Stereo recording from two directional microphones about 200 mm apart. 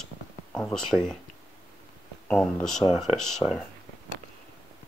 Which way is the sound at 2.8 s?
15° left (ahead or behind).